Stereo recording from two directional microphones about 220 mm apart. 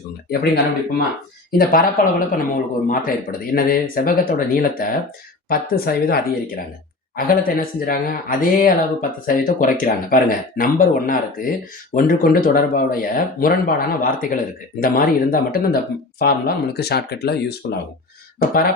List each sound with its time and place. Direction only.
0.3 s speech: 45° left (ahead or behind)